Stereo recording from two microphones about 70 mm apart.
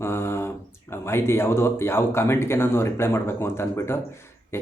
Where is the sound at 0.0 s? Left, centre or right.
Left.